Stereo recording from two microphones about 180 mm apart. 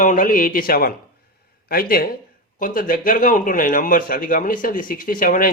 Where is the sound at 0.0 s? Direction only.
45° left (ahead or behind).